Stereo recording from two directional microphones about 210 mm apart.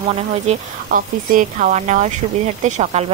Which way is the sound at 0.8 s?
40° right (ahead or behind).